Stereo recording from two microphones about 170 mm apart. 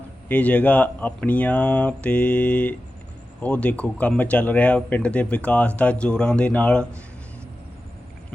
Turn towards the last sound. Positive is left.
turn(degrees=5)  # may be behind; listen again after turning